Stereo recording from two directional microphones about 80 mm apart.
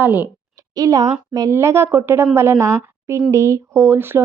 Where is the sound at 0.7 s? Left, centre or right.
Right.